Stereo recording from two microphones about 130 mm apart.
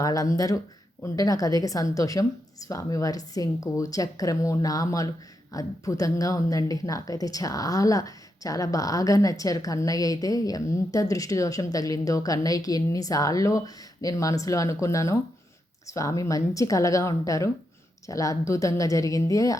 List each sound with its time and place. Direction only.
0.0 s speech: 25° left (ahead or behind)